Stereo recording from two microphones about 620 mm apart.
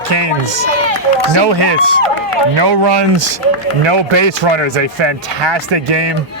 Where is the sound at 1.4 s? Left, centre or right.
Right.